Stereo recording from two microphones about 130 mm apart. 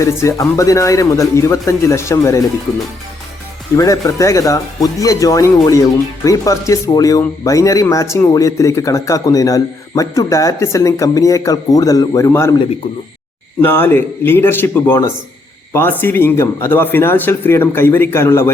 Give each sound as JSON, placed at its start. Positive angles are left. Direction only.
{"t": 0.0, "sound": "a man's voice", "side_deg": 25}
{"t": 3.8, "sound": "a man's voice", "side_deg": 25}
{"t": 13.7, "sound": "speech", "side_deg": 15}